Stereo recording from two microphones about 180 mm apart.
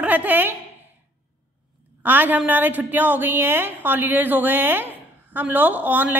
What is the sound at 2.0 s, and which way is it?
A woman's voice, 10° right (ahead or behind).